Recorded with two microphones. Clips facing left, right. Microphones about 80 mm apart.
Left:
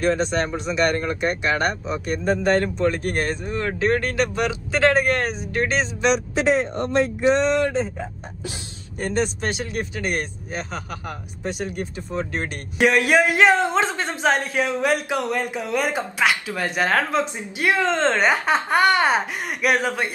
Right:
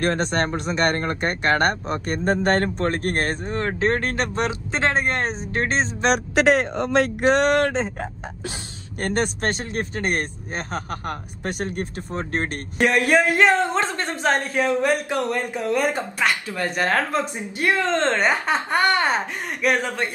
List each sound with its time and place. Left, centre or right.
0.0 s speech: right
6.3 s speech: right
9.0 s speech: right
13.0 s speech: centre
17.1 s speech: centre
17.6 s speech: centre